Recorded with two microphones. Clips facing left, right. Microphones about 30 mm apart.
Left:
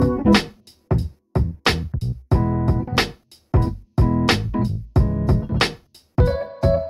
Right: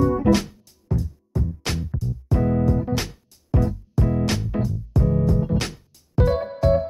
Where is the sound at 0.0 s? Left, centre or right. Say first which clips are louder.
Left 2 dB; left.